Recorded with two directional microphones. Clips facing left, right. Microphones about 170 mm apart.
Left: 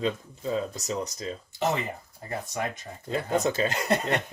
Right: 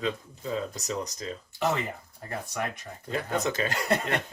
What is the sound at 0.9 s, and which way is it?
Speech, 25° left (ahead or behind).